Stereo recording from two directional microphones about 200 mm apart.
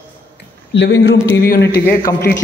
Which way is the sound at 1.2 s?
55° left (ahead or behind).